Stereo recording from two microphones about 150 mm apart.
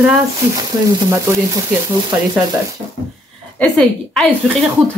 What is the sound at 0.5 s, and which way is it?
Frying, 25° right (ahead or behind).